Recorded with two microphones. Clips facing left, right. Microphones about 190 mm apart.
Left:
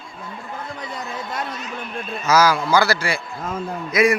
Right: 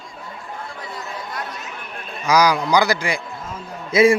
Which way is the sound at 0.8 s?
20° left (ahead or behind).